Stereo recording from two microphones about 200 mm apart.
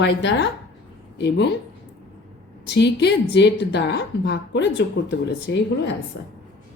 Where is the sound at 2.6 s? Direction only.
55° left (ahead or behind).